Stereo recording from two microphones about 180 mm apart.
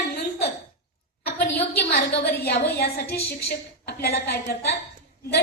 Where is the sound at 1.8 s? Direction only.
60° left (ahead or behind).